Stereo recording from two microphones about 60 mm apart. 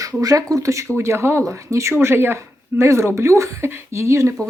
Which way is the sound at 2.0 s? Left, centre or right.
Right.